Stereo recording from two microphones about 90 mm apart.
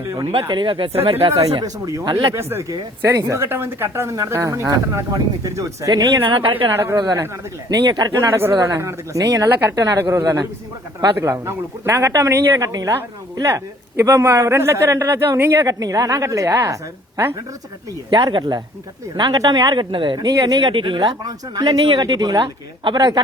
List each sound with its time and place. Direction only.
0.5 s speech: 65° right (ahead or behind)
1.6 s speech: 40° right (ahead or behind)
2.0 s speech: 55° right (ahead or behind)
2.3 s speech: 30° right (ahead or behind); by 6.2 s 45° right (ahead or behind)
6.2 s speech: 70° right (ahead or behind)
6.9 s speech: 45° right (ahead or behind)
8.3 s speech: 30° right (ahead or behind); by 10.4 s 45° right (ahead or behind)
11.2 s speech: 35° right (ahead or behind)
14.0 s speech: 35° right (ahead or behind)
15.6 s speech: 40° right (ahead or behind)
18.1 s speech: 55° right (ahead or behind)
20.1 s speech: 45° right (ahead or behind); by 21.1 s 65° right (ahead or behind)
21.2 s speech: 50° right (ahead or behind)